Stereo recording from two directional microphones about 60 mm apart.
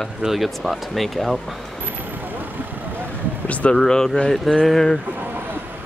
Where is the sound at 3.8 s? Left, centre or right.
Centre.